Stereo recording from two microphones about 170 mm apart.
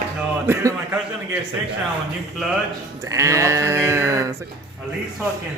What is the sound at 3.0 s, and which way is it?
Speech, 20° right (ahead or behind).